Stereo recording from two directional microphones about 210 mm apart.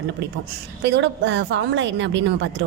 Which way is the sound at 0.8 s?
55° right (ahead or behind).